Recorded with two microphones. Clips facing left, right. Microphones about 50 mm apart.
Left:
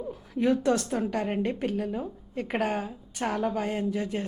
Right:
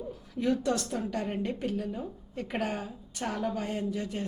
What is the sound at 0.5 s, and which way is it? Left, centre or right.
A woman's voice, left.